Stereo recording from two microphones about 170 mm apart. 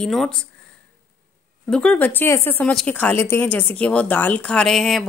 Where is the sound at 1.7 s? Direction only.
5° left (ahead or behind).